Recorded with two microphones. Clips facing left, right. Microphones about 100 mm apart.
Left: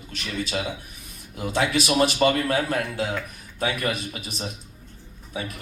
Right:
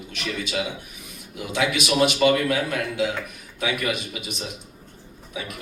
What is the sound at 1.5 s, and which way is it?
A man's voice, 35° left (ahead or behind).